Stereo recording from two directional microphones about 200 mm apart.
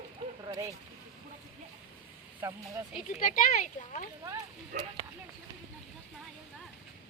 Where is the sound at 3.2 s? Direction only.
40° left (ahead or behind).